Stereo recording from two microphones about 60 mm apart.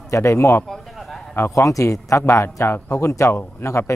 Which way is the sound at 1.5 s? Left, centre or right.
Left.